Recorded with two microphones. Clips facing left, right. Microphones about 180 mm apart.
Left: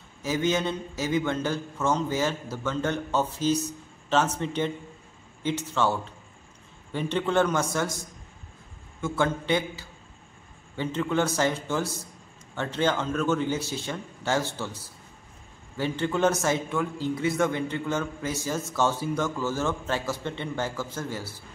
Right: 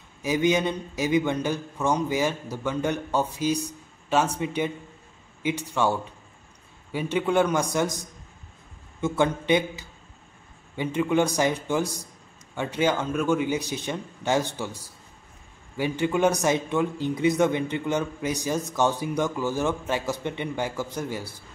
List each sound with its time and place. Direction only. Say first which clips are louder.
0.2 s a man's voice: right 3 dB; 15° right (ahead or behind)